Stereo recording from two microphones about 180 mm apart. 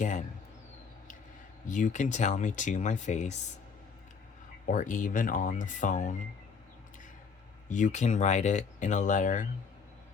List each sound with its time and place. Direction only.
0.0 s a sound: 45° left (ahead or behind)
1.6 s speech: 45° left (ahead or behind)
4.6 s speech: 45° left (ahead or behind)
7.7 s speech: 45° left (ahead or behind)